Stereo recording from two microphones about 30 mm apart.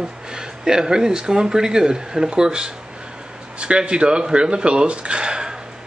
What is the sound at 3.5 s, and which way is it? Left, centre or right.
Speech, right.